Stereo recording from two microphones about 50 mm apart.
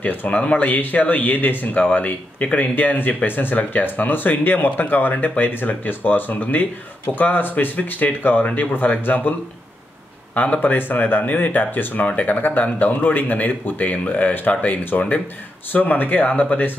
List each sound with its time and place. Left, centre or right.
0.0 s speech: left
10.3 s speech: left